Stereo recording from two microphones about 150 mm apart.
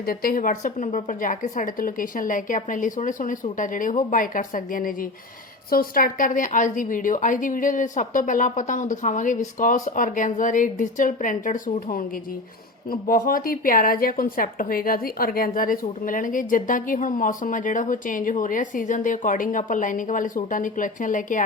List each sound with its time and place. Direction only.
0.0 s a woman's voice: 80° left; by 21.4 s 60° left (ahead or behind)